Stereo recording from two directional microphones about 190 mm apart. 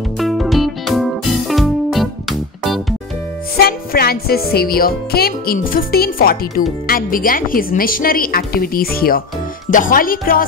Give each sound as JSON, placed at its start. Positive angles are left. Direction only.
{"t": 0.2, "sound": "music", "side_deg": 0}
{"t": 3.6, "sound": "speech", "side_deg": 55}